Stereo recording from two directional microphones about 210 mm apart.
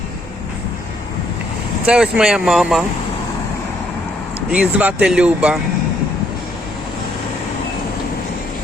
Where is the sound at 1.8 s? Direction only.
5° right (ahead or behind).